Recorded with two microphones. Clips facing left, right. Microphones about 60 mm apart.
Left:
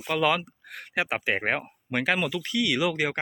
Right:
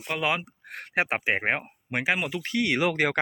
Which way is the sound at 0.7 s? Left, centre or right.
Right.